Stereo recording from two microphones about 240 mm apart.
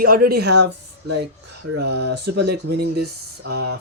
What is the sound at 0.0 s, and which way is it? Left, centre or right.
Speech, right.